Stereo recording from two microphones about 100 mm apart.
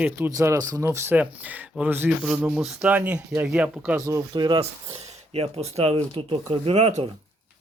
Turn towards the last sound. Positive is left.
turn(degrees=-70)  # may be behind; listen again after turning